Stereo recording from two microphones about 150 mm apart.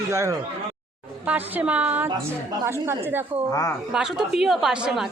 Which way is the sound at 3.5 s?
20° left (ahead or behind).